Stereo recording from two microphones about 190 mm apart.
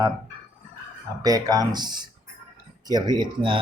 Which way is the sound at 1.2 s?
20° right (ahead or behind).